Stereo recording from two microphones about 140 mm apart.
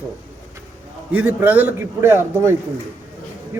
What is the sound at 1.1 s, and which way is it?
A man's voice, 15° right (ahead or behind).